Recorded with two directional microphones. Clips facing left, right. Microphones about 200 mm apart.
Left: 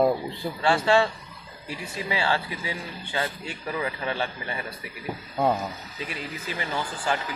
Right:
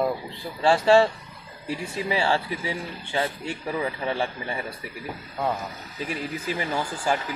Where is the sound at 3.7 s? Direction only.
25° right (ahead or behind).